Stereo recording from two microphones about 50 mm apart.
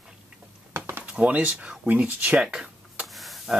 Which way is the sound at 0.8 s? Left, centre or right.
Right.